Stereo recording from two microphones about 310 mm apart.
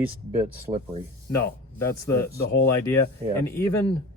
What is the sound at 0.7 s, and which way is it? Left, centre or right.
Speech, centre.